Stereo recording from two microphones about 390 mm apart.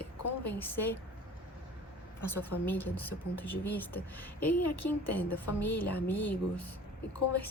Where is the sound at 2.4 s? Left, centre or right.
Left.